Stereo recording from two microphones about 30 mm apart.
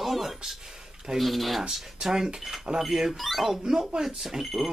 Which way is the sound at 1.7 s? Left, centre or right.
Centre.